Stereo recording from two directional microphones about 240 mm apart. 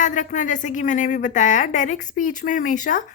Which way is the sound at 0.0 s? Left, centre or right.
Left.